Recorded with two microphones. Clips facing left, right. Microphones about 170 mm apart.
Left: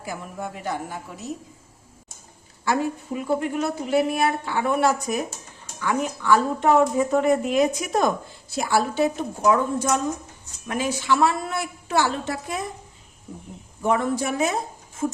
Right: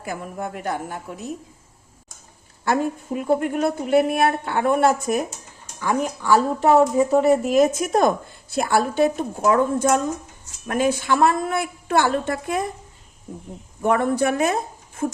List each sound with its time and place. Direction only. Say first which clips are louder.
0.0 s a woman's voice: right 3 dB; 55° right (ahead or behind)
2.6 s a woman's voice: right 2 dB; 50° right (ahead or behind)
5.8 s a woman's voice: right 2 dB; 40° right (ahead or behind)
13.8 s speech: right 3 dB; 55° right (ahead or behind)